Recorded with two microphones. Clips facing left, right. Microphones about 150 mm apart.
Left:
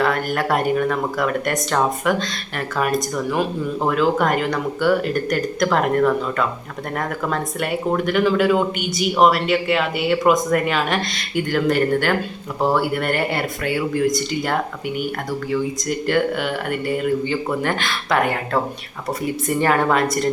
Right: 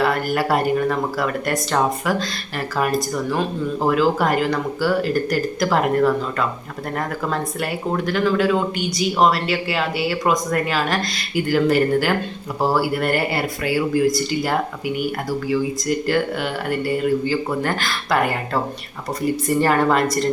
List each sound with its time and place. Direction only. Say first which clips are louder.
0.0 s speech: right 1 dB; 5° right (ahead or behind)